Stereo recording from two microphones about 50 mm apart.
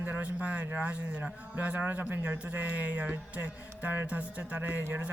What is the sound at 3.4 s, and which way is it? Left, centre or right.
Music, right.